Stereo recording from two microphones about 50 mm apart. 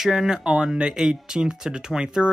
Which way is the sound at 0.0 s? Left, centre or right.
Centre.